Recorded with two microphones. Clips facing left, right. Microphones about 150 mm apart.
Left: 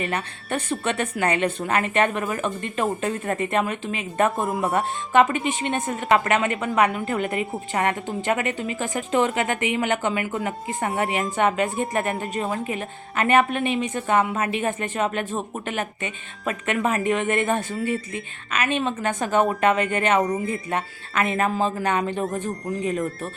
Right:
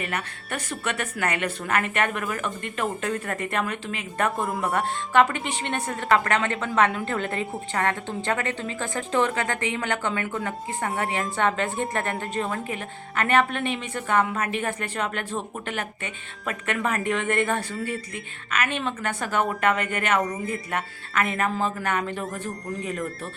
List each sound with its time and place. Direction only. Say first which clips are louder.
0.0 s speech: left 3 dB; 25° left (ahead or behind)
6.9 s a woman's voice: left 3 dB; 5° left (ahead or behind)
7.7 s a woman's voice: left 2 dB; 15° left (ahead or behind)